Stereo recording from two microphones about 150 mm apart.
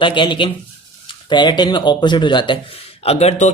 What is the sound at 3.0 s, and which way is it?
Speech, 45° left (ahead or behind).